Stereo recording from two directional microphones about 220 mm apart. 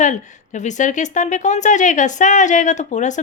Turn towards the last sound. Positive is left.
turn(degrees=35)  # may be behind; listen again after turning